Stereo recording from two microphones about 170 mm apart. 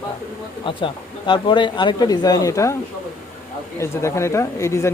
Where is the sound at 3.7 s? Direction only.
15° left (ahead or behind).